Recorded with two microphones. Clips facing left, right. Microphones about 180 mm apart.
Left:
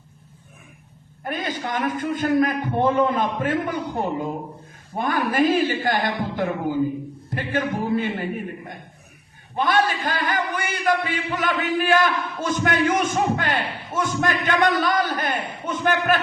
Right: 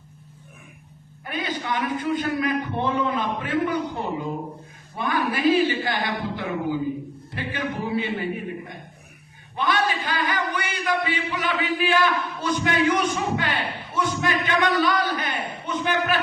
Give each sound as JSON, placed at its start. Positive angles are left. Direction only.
{"t": 1.2, "sound": "a man's voice", "side_deg": 45}